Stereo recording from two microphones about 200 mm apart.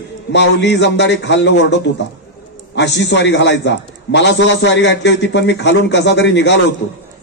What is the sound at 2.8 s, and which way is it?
A man's voice, 60° left (ahead or behind).